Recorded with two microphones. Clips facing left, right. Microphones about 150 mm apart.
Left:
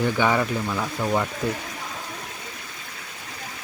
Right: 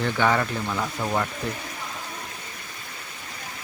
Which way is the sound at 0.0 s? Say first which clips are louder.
Left 1 dB; 10° left (ahead or behind).